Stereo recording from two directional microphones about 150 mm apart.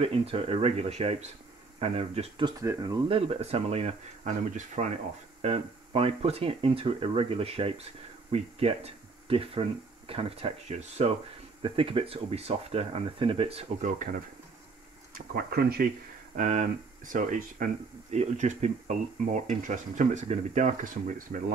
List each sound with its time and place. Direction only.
0.0 s speech: 40° right (ahead or behind)
2.6 s speech: 25° right (ahead or behind); by 4.9 s 55° right (ahead or behind)
5.4 s speech: 40° right (ahead or behind)
11.6 s speech: 35° right (ahead or behind)
13.7 s speech: 60° right (ahead or behind)
15.1 s speech: 90° right
16.3 s speech: 55° right (ahead or behind)
18.1 s speech: 50° right (ahead or behind)